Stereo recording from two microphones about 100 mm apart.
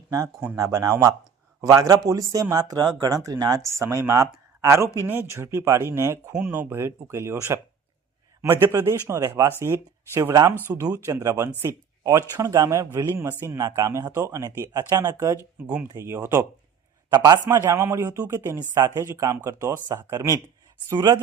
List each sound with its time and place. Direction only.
0.1 s speech: 35° right (ahead or behind)
15.6 s speech: 15° right (ahead or behind)
16.0 s speech: 25° right (ahead or behind)
17.1 s a man's voice: 45° right (ahead or behind)
17.5 s speech: 25° right (ahead or behind)
20.9 s a man's voice: 45° right (ahead or behind)